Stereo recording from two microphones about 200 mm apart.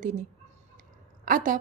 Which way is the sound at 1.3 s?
45° right (ahead or behind).